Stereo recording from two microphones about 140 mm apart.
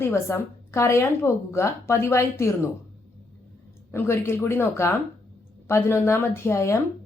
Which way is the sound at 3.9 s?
15° left (ahead or behind).